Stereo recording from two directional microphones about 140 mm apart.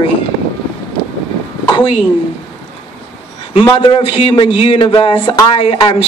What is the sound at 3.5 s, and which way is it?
A man's voice, 35° left (ahead or behind).